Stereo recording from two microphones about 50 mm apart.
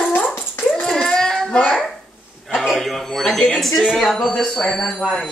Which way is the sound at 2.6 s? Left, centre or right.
Centre.